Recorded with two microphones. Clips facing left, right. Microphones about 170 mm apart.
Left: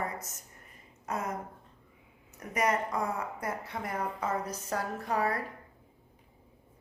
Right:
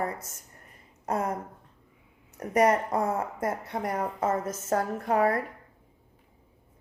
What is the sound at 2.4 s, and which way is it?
Speech, 35° right (ahead or behind).